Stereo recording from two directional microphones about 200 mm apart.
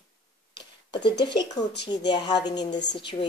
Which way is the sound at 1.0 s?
60° left (ahead or behind).